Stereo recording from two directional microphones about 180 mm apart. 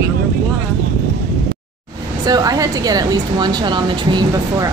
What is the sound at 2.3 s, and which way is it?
A woman's voice, 20° right (ahead or behind).